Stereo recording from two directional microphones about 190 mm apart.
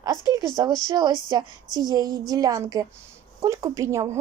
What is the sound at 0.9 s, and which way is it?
A woman's voice, 20° right (ahead or behind).